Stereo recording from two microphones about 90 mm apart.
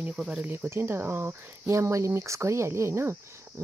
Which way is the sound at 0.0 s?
10° right (ahead or behind).